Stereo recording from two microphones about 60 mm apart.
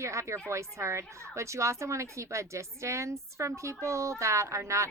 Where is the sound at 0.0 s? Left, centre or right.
Right.